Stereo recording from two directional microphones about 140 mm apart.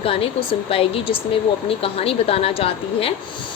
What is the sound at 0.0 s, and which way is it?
Speech, 40° left (ahead or behind).